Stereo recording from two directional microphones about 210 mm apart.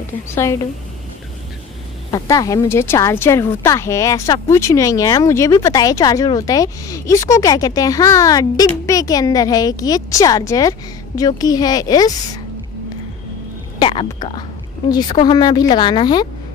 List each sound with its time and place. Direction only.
0.3 s speech: 10° left (ahead or behind)
2.0 s speech: 20° left (ahead or behind)
13.7 s speech: 25° left (ahead or behind)